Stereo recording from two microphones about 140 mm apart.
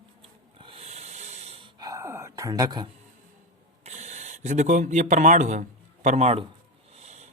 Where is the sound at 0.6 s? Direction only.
45° right (ahead or behind).